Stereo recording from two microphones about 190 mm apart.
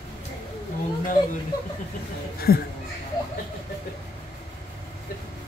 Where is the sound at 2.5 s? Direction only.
55° left (ahead or behind).